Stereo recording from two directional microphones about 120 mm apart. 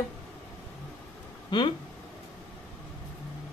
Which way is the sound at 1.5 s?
40° left (ahead or behind).